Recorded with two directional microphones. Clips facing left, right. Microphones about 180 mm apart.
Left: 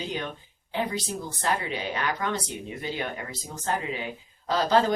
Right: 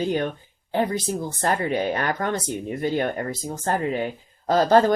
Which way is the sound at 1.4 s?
50° right (ahead or behind).